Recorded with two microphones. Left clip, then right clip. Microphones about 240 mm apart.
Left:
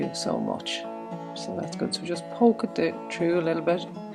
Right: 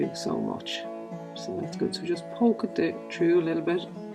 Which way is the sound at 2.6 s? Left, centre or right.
Centre.